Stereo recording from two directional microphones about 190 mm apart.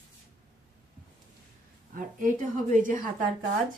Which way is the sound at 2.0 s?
45° right (ahead or behind).